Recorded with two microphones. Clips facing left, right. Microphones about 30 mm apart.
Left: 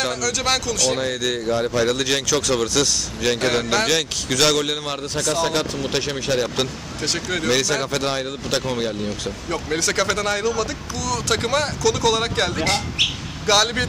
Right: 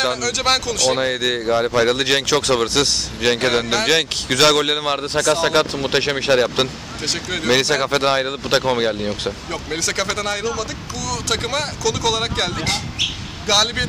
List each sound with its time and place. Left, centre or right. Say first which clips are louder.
0.0 s speech: right 3 dB; right
7.0 s speech: even; centre
7.7 s speech: right 5 dB; right
9.5 s speech: left 1 dB; centre